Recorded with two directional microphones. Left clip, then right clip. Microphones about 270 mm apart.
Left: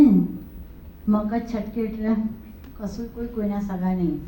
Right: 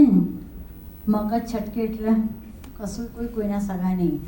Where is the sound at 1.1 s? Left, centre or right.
Right.